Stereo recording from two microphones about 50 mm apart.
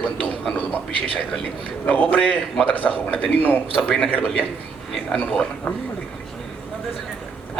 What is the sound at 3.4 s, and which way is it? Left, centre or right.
A man's voice, left.